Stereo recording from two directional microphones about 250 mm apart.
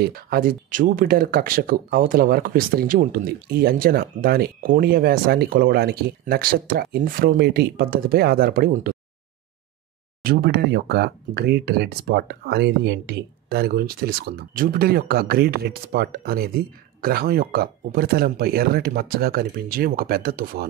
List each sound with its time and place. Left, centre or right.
0.0 s speech: right
10.2 s speech: right